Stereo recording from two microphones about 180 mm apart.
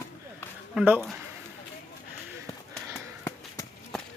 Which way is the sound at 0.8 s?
10° right (ahead or behind).